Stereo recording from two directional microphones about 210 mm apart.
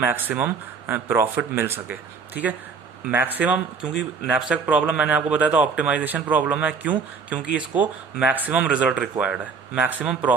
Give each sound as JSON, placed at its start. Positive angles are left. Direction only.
{"t": 0.0, "sound": "speech", "side_deg": -10}